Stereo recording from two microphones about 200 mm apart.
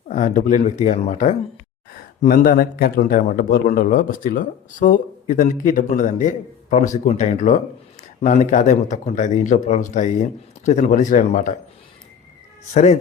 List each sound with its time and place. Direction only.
0.1 s a man's voice: 40° left (ahead or behind)
12.7 s speech: 35° left (ahead or behind)